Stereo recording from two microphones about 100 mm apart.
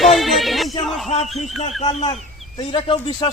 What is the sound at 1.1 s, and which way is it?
Speech, 90° left.